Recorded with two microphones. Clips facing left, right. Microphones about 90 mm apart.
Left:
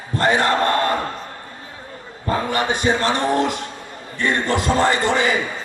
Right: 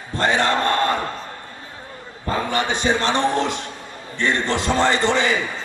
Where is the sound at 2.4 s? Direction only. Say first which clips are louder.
Left 1 dB; 25° right (ahead or behind).